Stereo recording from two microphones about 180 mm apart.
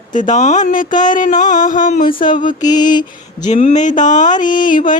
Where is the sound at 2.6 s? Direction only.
20° left (ahead or behind).